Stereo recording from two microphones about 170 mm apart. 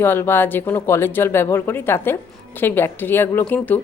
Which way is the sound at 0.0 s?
15° left (ahead or behind).